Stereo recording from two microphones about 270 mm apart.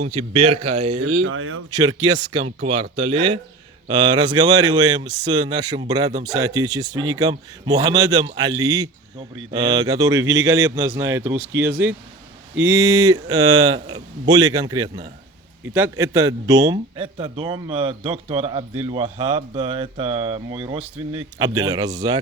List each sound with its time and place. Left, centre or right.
0.0 s a man's voice: right
1.3 s speech: right
1.7 s a man's voice: centre